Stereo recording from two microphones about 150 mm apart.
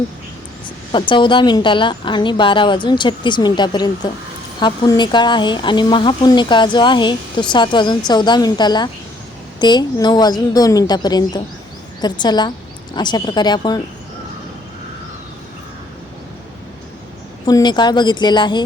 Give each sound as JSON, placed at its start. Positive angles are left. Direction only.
{"t": 0.9, "sound": "a woman's voice", "side_deg": 30}
{"t": 17.4, "sound": "a woman's voice", "side_deg": 30}